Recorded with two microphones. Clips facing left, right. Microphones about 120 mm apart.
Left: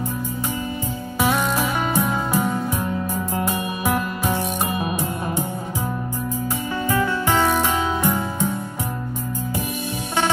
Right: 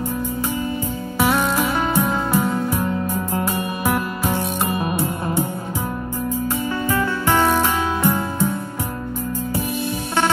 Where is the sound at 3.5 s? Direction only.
15° left (ahead or behind).